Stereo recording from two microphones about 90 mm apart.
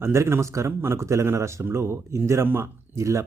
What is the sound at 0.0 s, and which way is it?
Speech, 30° right (ahead or behind).